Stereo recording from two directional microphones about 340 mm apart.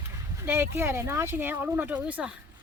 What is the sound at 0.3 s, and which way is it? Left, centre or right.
Speech, centre.